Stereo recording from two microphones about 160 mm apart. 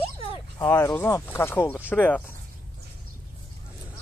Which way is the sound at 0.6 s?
10° left (ahead or behind).